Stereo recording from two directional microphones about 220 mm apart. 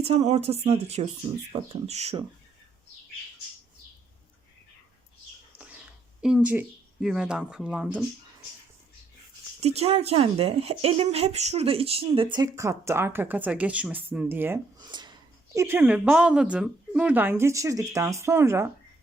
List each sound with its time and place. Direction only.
0.0 s speech: 30° right (ahead or behind)
6.2 s speech: 5° right (ahead or behind)
9.6 s speech: 30° right (ahead or behind); by 18.7 s 10° right (ahead or behind)